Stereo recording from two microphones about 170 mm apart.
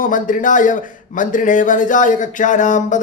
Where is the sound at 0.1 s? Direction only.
50° left (ahead or behind).